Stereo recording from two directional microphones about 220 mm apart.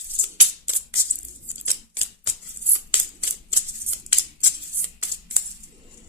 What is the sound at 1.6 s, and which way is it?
Typewriter, 10° right (ahead or behind).